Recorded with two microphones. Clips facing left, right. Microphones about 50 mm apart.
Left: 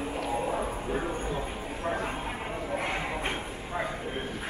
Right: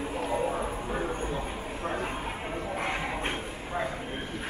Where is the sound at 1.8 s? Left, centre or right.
Centre.